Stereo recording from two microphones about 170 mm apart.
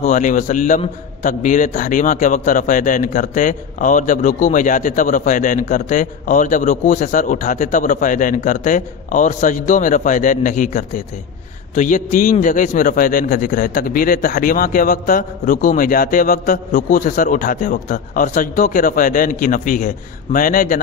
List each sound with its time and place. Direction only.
0.0 s a man's voice: 50° left (ahead or behind)